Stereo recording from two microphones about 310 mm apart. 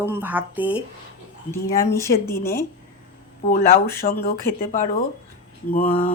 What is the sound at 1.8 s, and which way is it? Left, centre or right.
Speech, centre.